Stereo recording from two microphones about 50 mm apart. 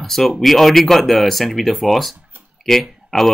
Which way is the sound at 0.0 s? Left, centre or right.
Centre.